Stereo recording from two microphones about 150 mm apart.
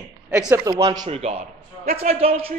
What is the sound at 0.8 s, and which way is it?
Speech, 25° right (ahead or behind).